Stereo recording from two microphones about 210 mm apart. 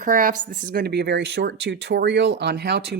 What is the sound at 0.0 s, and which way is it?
Speech, 40° right (ahead or behind).